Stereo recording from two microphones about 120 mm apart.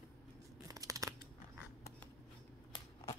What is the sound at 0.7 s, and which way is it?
Scissors, 30° right (ahead or behind).